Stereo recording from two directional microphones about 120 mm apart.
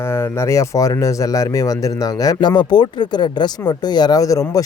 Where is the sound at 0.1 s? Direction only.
25° left (ahead or behind).